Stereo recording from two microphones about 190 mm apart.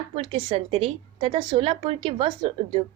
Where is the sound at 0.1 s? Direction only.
30° right (ahead or behind).